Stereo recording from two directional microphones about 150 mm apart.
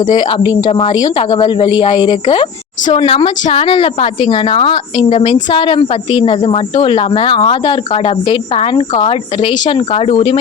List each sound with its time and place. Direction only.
0.1 s speech: 35° left (ahead or behind)